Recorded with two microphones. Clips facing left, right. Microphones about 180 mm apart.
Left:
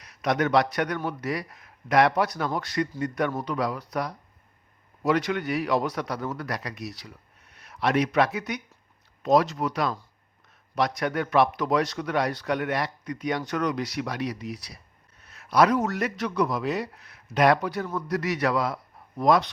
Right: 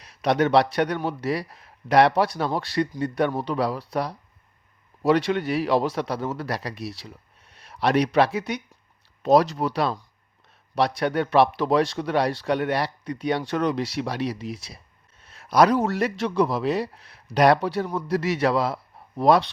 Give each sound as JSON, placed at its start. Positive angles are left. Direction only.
{"t": 0.0, "sound": "a man's voice", "side_deg": -30}